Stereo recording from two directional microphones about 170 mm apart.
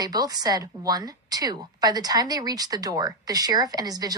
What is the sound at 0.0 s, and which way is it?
A woman's voice, 25° right (ahead or behind).